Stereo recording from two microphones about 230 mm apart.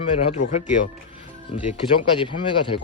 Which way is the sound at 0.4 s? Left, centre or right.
Left.